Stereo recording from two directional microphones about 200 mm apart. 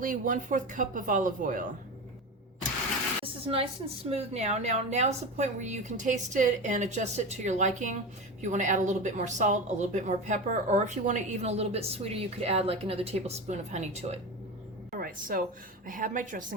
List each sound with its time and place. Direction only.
0.0 s speech: 40° right (ahead or behind)
3.4 s a woman's voice: 30° right (ahead or behind)
14.9 s a sound: 45° right (ahead or behind)
15.9 s speech: 40° right (ahead or behind)